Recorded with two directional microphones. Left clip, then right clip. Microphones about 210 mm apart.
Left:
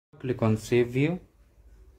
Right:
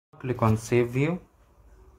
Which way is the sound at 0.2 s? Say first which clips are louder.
Right 2 dB; 15° left (ahead or behind).